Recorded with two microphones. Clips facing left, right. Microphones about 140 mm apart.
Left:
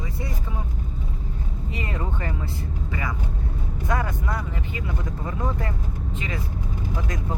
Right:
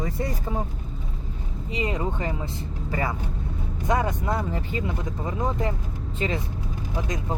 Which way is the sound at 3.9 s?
20° right (ahead or behind).